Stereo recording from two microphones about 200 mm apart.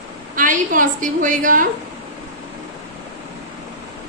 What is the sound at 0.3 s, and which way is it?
A woman's voice, 40° right (ahead or behind).